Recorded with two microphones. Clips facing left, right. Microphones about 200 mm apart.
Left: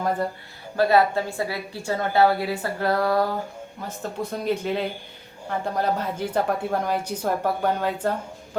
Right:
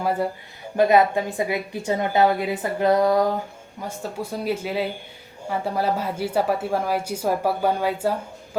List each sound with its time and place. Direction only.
0.0 s a woman's voice: 10° right (ahead or behind)